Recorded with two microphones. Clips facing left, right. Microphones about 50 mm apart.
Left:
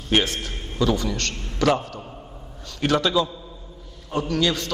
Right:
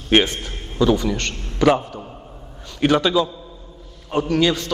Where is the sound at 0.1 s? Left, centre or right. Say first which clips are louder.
Right 5 dB; right.